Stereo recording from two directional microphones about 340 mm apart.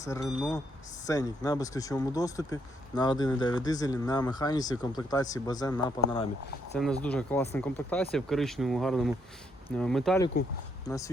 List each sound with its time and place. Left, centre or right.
0.0 s speech: centre
0.3 s speech: centre
1.0 s speech: centre